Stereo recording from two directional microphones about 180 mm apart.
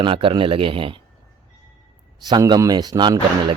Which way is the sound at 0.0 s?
30° right (ahead or behind).